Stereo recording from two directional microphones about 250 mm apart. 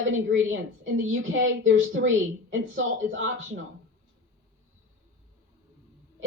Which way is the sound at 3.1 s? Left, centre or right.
Right.